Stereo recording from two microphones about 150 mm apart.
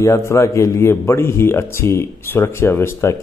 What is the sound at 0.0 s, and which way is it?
A man's voice, 20° left (ahead or behind).